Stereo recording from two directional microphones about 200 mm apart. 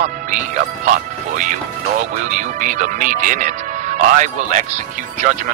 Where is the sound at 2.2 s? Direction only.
40° right (ahead or behind).